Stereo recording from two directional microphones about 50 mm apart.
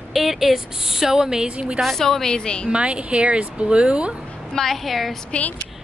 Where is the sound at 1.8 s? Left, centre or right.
Centre.